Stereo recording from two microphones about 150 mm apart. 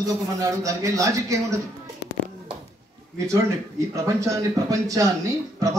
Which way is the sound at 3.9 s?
20° right (ahead or behind).